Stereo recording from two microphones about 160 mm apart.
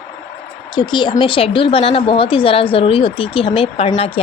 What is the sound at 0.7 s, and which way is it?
A woman's voice, 30° left (ahead or behind).